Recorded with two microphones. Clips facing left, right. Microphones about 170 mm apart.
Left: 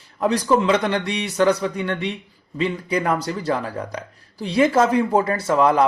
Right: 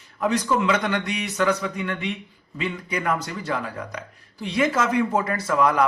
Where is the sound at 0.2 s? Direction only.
30° left (ahead or behind).